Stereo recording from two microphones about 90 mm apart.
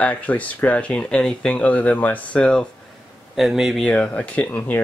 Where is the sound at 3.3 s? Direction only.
5° right (ahead or behind).